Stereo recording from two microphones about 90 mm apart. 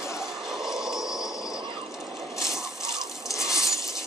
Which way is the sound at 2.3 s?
5° right (ahead or behind).